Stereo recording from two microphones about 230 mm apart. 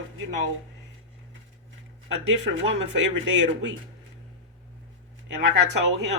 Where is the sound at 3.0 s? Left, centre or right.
Right.